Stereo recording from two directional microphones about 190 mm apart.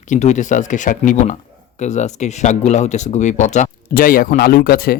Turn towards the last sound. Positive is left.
turn(degrees=50)  # may be behind; listen again after turning